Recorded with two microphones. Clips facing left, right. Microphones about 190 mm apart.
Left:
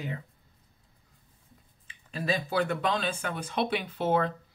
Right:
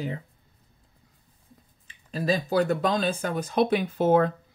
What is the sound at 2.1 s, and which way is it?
Speech, 35° right (ahead or behind).